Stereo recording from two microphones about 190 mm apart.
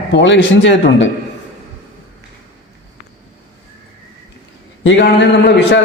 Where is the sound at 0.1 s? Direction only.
70° left (ahead or behind).